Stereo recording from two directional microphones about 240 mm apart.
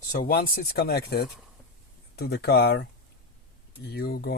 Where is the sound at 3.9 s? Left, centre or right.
Left.